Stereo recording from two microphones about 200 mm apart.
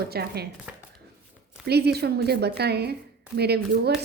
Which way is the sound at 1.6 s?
55° right (ahead or behind).